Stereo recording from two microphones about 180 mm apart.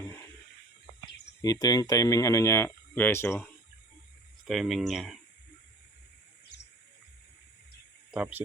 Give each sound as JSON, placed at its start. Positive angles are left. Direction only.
{"t": 1.4, "sound": "speech", "side_deg": 20}
{"t": 4.4, "sound": "speech", "side_deg": 0}
{"t": 8.1, "sound": "speech", "side_deg": -10}